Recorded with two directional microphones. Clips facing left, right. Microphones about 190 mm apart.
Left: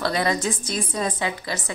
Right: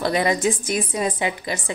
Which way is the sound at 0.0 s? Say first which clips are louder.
Right 3 dB; 15° right (ahead or behind).